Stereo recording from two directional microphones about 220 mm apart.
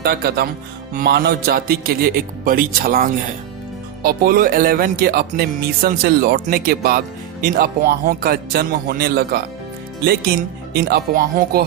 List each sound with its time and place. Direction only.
0.0 s speech: 45° right (ahead or behind)
4.0 s music: 40° right (ahead or behind)
7.5 s speech: 45° right (ahead or behind)
10.8 s speech: 45° right (ahead or behind)